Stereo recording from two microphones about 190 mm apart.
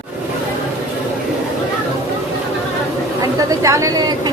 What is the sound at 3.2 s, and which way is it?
A woman's voice, 15° right (ahead or behind).